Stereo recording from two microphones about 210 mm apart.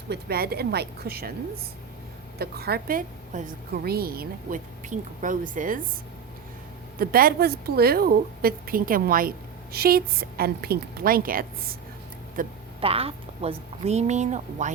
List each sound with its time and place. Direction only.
0.1 s a woman's voice: 45° right (ahead or behind)
2.4 s a woman's voice: 50° right (ahead or behind)
7.0 s a woman's voice: 45° right (ahead or behind)
12.8 s a woman's voice: 25° right (ahead or behind)